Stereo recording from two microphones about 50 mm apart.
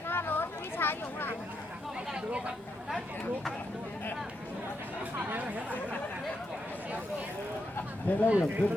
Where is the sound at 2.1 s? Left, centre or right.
Right.